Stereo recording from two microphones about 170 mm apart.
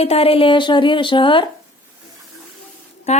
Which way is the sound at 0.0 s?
35° left (ahead or behind).